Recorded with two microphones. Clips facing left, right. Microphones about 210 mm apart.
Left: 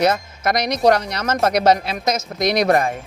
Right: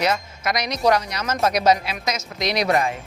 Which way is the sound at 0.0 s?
55° left (ahead or behind).